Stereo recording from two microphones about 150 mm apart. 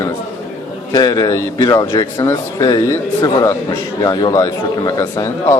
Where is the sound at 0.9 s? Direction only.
25° left (ahead or behind).